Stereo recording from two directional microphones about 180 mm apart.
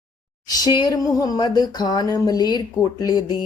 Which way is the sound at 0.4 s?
20° left (ahead or behind).